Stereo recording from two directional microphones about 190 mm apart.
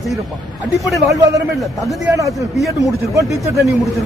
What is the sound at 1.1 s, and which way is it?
Speech, 15° right (ahead or behind).